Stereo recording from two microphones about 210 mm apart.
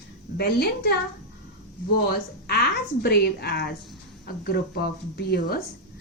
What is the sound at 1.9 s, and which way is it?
A woman's voice, 45° left (ahead or behind).